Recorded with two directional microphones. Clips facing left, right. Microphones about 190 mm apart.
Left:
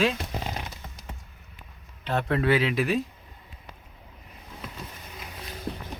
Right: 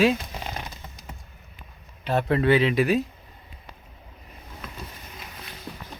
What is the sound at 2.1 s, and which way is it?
Speech, 5° right (ahead or behind).